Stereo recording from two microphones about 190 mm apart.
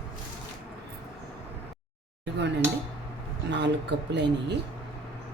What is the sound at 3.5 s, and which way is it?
Speech, 65° right (ahead or behind).